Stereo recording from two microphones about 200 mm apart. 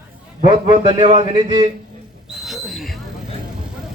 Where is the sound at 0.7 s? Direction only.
25° right (ahead or behind).